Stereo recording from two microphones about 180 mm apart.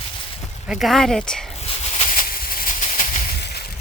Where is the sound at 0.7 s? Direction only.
Centre (ahead or behind).